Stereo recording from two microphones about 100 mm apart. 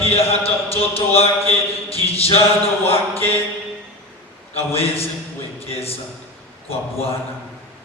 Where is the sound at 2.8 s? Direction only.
75° left (ahead or behind).